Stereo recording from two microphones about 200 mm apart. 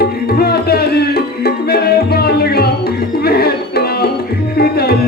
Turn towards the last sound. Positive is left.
turn(degrees=50)  # may be behind; listen again after turning